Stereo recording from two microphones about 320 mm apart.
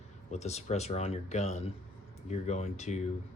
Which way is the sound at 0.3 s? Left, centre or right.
Left.